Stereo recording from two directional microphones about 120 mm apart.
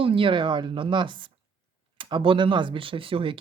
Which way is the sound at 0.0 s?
50° right (ahead or behind).